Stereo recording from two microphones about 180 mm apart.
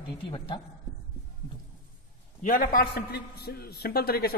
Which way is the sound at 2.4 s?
45° left (ahead or behind).